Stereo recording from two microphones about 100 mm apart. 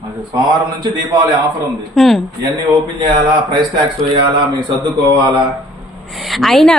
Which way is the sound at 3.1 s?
50° right (ahead or behind).